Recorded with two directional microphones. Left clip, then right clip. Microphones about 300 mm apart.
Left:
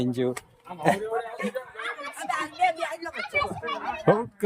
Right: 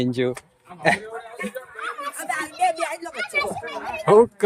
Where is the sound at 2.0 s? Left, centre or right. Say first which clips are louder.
Right 3 dB; right.